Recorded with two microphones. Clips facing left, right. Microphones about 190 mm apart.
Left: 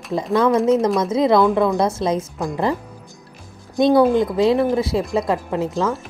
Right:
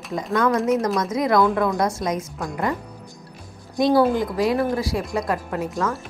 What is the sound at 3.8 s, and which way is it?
Speech, 25° left (ahead or behind).